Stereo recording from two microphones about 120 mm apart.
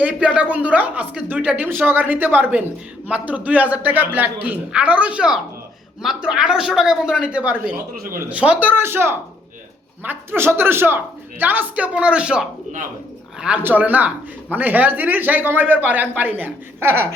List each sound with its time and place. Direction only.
0.0 s a man's voice: 10° right (ahead or behind)